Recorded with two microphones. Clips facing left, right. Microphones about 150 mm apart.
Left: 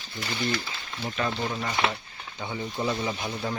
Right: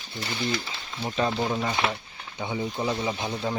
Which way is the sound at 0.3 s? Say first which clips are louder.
Even; 10° right (ahead or behind).